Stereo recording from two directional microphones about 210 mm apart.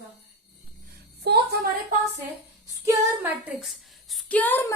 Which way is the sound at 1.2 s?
50° right (ahead or behind).